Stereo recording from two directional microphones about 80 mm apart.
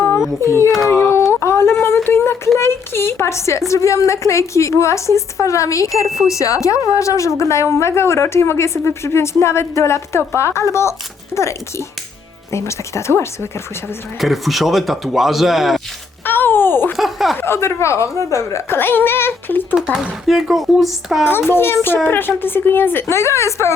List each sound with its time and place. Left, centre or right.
0.4 s speech: left
1.3 s a sound: left
2.0 s speech: left
12.5 s speech: left
14.2 s speech: centre
16.2 s groan: left
17.0 s speech: centre
17.3 s a woman's voice: left
19.7 s speech: centre
21.5 s a woman's voice: left